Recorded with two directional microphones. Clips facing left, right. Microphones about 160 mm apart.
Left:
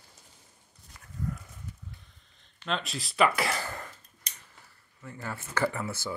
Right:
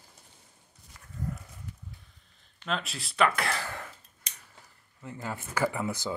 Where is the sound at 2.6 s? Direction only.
Centre (ahead or behind).